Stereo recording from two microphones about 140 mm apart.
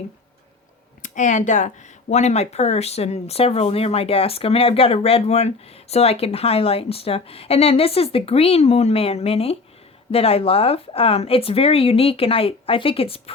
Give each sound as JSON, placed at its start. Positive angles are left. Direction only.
{"t": 1.0, "sound": "speech", "side_deg": 65}